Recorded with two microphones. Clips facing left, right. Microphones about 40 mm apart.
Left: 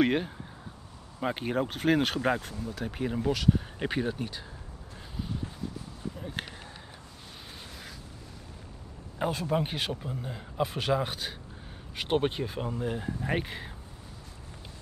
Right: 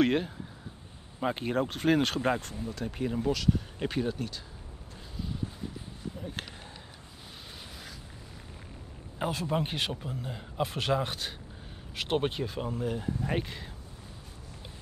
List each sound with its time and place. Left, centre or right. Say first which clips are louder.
0.0 s speech: even; centre
9.2 s speech: left 2 dB; centre